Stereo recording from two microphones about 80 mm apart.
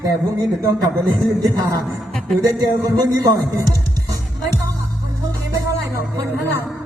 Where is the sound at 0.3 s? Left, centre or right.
Right.